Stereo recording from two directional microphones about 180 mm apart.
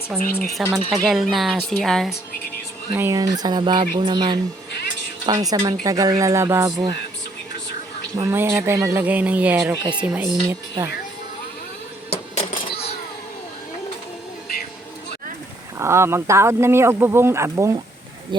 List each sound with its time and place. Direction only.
0.1 s speech: 5° right (ahead or behind)
2.9 s speech: 15° right (ahead or behind)
8.2 s speech: 15° right (ahead or behind)
9.7 s speech: 25° right (ahead or behind)
10.0 s speech: 10° right (ahead or behind)
12.1 s a sound: 40° left (ahead or behind)
15.8 s speech: 15° right (ahead or behind)